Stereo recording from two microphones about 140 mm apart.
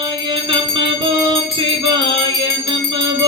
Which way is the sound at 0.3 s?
35° right (ahead or behind).